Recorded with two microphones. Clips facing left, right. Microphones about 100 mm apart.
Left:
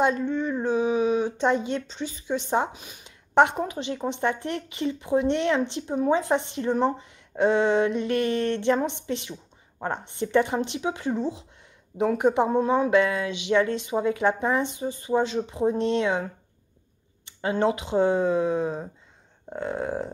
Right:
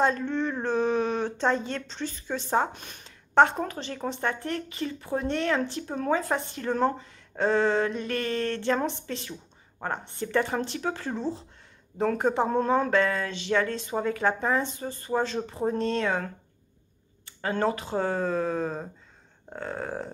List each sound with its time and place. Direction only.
0.0 s speech: 15° left (ahead or behind)